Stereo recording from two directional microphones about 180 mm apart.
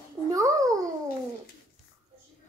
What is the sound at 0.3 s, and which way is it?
Babbling, 20° right (ahead or behind).